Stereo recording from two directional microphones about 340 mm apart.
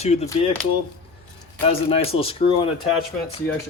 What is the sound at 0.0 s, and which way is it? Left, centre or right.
Speech, centre.